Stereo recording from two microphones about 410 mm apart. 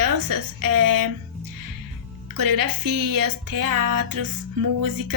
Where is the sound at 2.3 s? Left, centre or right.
Right.